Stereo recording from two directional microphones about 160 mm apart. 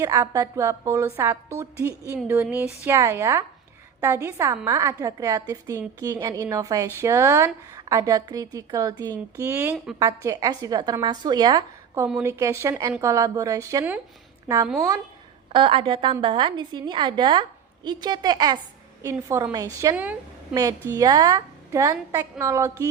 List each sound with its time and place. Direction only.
0.0 s a woman's voice: 20° right (ahead or behind)
15.5 s a woman's voice: 35° right (ahead or behind)